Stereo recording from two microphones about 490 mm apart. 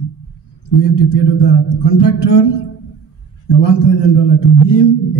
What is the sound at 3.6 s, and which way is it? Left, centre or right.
A man's voice, left.